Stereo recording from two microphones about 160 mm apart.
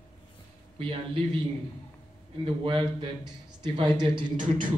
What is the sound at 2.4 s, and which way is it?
Speech, 35° right (ahead or behind).